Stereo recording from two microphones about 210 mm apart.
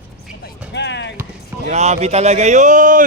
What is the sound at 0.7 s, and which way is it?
Speech, 55° left (ahead or behind).